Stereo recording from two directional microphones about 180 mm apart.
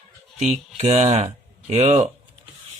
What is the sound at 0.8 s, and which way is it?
Speech, 35° right (ahead or behind).